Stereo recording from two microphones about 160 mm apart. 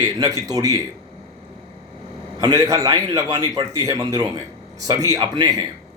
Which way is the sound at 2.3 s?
25° right (ahead or behind).